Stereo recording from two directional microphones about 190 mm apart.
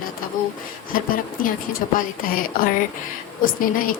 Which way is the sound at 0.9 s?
50° left (ahead or behind).